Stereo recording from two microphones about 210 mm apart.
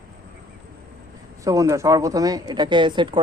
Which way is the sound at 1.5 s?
15° right (ahead or behind).